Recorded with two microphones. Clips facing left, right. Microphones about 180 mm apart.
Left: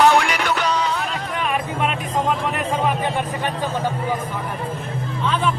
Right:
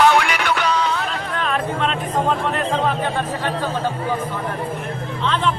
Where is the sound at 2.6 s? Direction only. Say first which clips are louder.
Right 1 dB; 15° left (ahead or behind).